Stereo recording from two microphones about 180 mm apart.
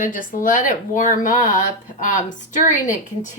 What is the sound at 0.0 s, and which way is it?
A woman's voice, 50° left (ahead or behind).